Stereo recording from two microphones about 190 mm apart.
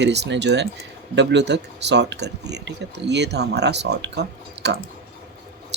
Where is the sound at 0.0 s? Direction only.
65° right (ahead or behind).